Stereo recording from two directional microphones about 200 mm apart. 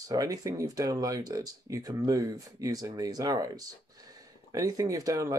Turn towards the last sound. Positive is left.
turn(degrees=-15)  # may be behind; listen again after turning